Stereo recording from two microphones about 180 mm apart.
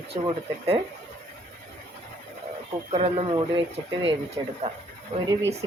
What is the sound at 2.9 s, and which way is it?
Speech, 35° right (ahead or behind).